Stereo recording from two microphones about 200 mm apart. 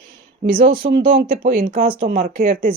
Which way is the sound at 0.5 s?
45° right (ahead or behind).